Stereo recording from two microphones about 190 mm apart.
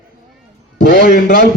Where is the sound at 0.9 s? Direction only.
45° left (ahead or behind).